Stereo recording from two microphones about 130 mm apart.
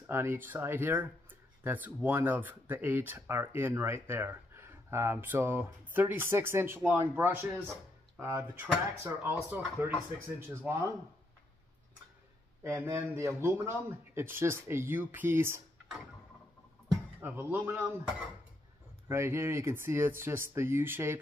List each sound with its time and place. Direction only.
0.0 s speech: 20° right (ahead or behind)
12.6 s speech: 20° right (ahead or behind)
17.2 s speech: 15° right (ahead or behind)
19.0 s speech: 20° right (ahead or behind)